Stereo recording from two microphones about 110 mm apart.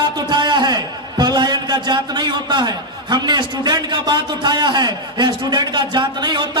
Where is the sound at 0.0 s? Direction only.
40° right (ahead or behind).